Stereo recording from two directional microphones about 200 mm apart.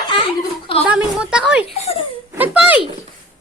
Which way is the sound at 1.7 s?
30° left (ahead or behind).